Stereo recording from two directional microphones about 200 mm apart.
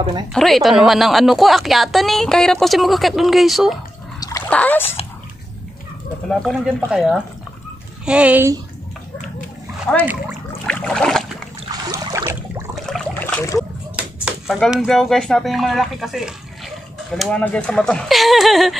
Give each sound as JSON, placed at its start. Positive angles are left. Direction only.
{"t": 0.3, "sound": "a woman's voice", "side_deg": 0}
{"t": 4.2, "sound": "splash", "side_deg": 15}
{"t": 6.2, "sound": "a woman's voice", "side_deg": 0}
{"t": 9.9, "sound": "speech", "side_deg": 5}
{"t": 10.6, "sound": "boat", "side_deg": 5}
{"t": 11.7, "sound": "a sound", "side_deg": -20}
{"t": 12.7, "sound": "a sound", "side_deg": 0}
{"t": 13.9, "sound": "speech", "side_deg": -5}